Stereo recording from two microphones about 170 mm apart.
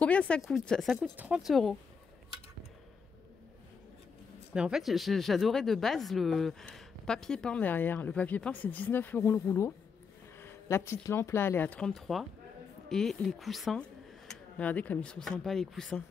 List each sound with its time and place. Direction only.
0.0 s a sound: 5° left (ahead or behind)
0.5 s speech: 5° left (ahead or behind)
4.6 s speech: 5° right (ahead or behind)